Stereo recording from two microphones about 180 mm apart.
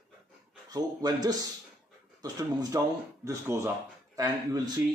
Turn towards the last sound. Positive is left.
turn(degrees=-20)  # may be behind; listen again after turning